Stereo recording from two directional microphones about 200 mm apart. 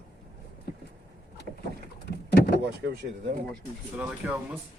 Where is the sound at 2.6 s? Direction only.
55° right (ahead or behind).